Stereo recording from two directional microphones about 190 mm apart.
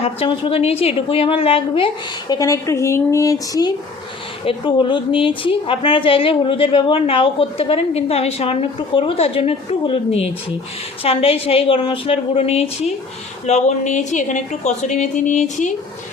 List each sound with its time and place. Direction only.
0.0 s a woman's voice: 30° left (ahead or behind)
2.3 s a woman's voice: 20° left (ahead or behind); by 15.7 s 40° left (ahead or behind)